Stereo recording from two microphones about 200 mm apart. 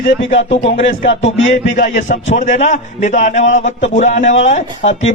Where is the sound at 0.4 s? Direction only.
30° left (ahead or behind).